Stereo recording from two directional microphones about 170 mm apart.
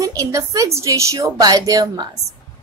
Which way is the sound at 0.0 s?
20° right (ahead or behind).